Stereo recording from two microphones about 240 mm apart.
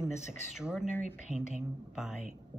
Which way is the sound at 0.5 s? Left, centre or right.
Centre.